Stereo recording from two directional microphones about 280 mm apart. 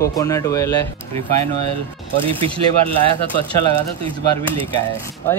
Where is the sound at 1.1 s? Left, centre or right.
Right.